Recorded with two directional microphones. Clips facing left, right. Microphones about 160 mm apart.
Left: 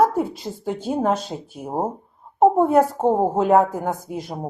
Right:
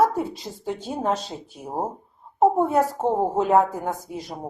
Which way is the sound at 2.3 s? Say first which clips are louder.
Left 4 dB; centre (ahead or behind).